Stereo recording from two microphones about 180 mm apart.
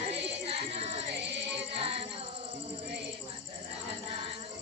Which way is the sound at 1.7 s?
30° right (ahead or behind).